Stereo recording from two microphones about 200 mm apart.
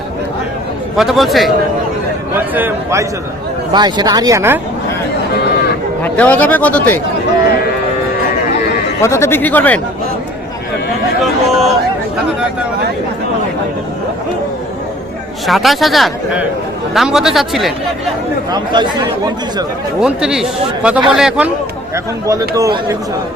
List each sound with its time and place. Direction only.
0.9 s speech: centre (ahead or behind)
2.6 s a man's voice: 10° right (ahead or behind)
6.0 s speech: 10° left (ahead or behind)
9.0 s speech: 15° left (ahead or behind)
11.2 s speech: centre (ahead or behind)
15.4 s speech: centre (ahead or behind)
18.5 s speech: 20° right (ahead or behind)
20.0 s a man's voice: 5° right (ahead or behind)
21.9 s a man's voice: 15° right (ahead or behind)